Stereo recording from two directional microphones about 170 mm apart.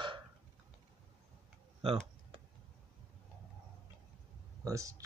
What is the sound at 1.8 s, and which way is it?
Speech, 35° right (ahead or behind).